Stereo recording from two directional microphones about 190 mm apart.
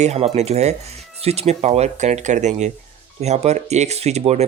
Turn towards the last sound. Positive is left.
turn(degrees=-35)  # may be behind; listen again after turning